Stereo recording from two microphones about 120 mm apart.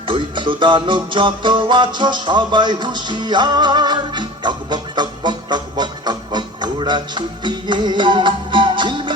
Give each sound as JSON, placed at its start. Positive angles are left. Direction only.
{"t": 0.1, "sound": "music", "side_deg": -45}